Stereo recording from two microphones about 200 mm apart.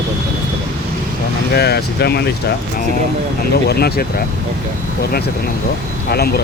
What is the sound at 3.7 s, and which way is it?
Speech, 50° left (ahead or behind).